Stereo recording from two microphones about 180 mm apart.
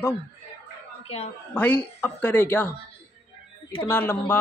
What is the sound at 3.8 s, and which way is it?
Speech, 10° left (ahead or behind).